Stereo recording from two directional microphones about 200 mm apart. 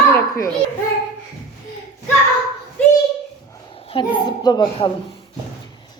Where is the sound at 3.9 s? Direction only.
25° left (ahead or behind).